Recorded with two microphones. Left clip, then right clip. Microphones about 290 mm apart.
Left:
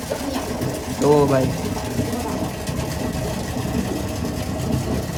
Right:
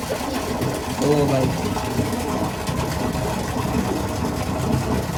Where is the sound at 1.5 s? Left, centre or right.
Centre.